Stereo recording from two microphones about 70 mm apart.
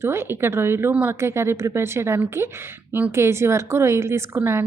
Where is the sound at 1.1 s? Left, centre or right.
Right.